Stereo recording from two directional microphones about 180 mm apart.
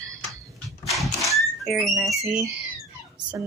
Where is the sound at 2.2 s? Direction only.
10° right (ahead or behind).